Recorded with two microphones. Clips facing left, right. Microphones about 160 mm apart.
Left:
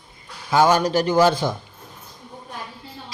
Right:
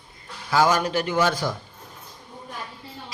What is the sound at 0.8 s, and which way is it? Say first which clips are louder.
Speech: left 5 dB; 35° left (ahead or behind).